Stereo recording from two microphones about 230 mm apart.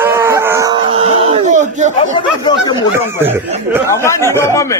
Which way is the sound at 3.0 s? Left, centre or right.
Centre.